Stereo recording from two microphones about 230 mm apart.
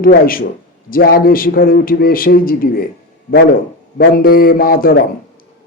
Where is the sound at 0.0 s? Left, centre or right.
Left.